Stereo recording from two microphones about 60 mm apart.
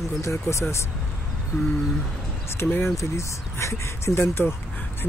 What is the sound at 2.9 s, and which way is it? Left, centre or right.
Speech, left.